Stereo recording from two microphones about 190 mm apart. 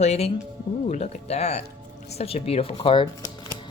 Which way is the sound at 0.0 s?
35° left (ahead or behind).